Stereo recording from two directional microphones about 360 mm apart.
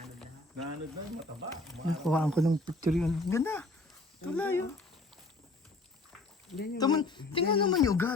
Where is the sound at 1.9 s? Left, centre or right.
Centre.